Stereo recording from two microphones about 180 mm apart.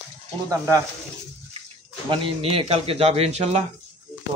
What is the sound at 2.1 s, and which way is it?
Speech, 30° right (ahead or behind).